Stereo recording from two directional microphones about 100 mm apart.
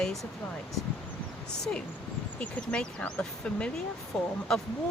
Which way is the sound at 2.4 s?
10° left (ahead or behind).